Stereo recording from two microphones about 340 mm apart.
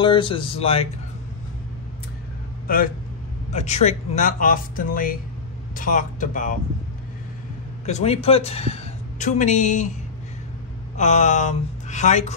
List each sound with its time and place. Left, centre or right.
0.0 s speech: centre
2.6 s a man's voice: left
7.8 s speech: centre
11.0 s speech: left